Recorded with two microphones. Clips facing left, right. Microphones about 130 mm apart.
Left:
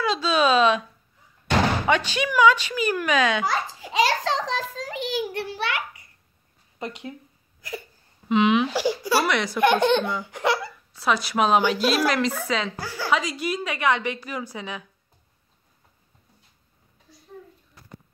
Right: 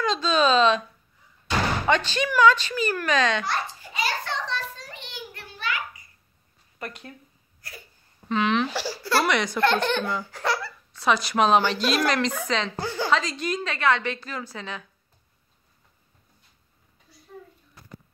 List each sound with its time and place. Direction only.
0.0 s a sound: 10° left (ahead or behind)
1.9 s a woman's voice: 10° left (ahead or behind)
3.8 s a sound: 90° left; by 6.0 s 75° left (ahead or behind)
8.3 s speech: 15° left (ahead or behind)
9.2 s a woman's voice: centre (ahead or behind)
9.6 s a woman's voice: 15° left (ahead or behind)
10.9 s a woman's voice: 5° left (ahead or behind)
12.7 s a woman's voice: 20° right (ahead or behind)
13.1 s a woman's voice: 10° left (ahead or behind)